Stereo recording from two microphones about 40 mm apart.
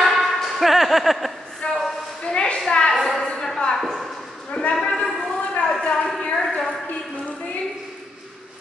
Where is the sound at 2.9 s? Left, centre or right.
Centre.